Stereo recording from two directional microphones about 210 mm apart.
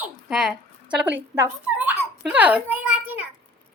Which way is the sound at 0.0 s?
Centre (ahead or behind).